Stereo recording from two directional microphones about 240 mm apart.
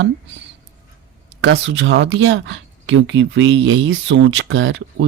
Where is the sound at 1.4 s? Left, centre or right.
Right.